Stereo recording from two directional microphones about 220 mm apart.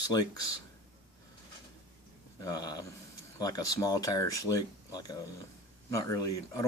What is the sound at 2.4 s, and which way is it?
Speech, 15° left (ahead or behind).